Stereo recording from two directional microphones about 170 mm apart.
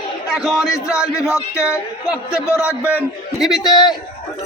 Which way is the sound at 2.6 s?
10° right (ahead or behind).